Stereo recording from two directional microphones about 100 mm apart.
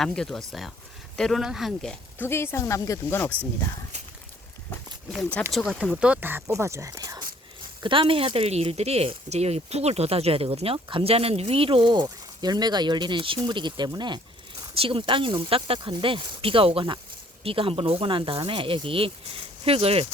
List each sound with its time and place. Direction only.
0.0 s speech: 5° left (ahead or behind)
2.1 s speech: 25° left (ahead or behind)
5.5 s speech: centre (ahead or behind)
5.8 s speech: 10° right (ahead or behind); by 7.3 s 40° right (ahead or behind)
7.8 s speech: 60° right (ahead or behind)
14.8 s speech: 65° right (ahead or behind)
19.6 s speech: 75° right (ahead or behind)